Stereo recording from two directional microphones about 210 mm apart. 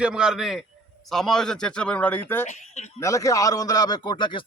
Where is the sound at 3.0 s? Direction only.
15° left (ahead or behind).